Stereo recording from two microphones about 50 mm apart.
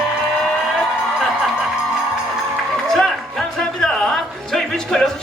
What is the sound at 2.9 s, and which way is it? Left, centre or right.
Music, centre.